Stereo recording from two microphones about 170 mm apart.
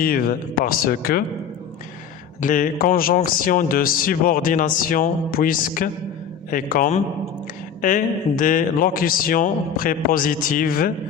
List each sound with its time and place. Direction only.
0.0 s a man's voice: 55° left (ahead or behind)
2.4 s a man's voice: 50° left (ahead or behind)